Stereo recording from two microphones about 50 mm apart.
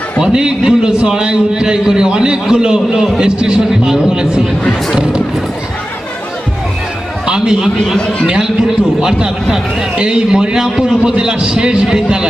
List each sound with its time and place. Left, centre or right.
0.2 s a man's voice: centre
7.3 s a man's voice: centre
7.9 s a man's voice: centre
9.0 s a man's voice: centre